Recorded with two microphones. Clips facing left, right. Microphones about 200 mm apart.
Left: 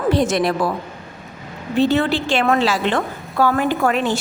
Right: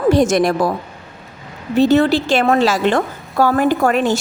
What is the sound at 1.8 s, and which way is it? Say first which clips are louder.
A woman's voice: right 4 dB; 40° right (ahead or behind).